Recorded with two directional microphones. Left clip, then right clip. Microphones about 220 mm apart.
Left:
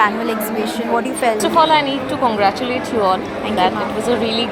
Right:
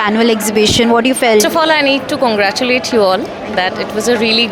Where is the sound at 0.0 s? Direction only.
45° right (ahead or behind).